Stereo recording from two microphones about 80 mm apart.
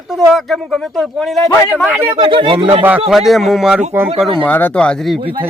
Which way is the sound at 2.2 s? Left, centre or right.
Right.